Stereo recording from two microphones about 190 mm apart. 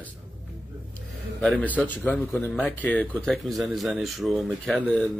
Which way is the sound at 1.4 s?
5° left (ahead or behind).